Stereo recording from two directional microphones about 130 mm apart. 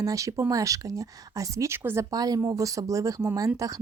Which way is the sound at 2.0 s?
30° right (ahead or behind).